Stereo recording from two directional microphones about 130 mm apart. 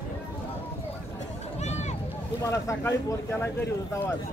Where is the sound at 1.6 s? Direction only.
60° left (ahead or behind).